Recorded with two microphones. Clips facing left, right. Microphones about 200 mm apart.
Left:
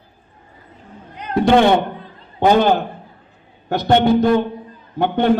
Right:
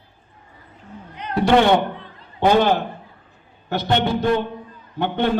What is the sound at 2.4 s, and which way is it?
A man's voice, 45° left (ahead or behind).